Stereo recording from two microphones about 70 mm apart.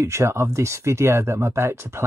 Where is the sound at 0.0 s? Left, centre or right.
Right.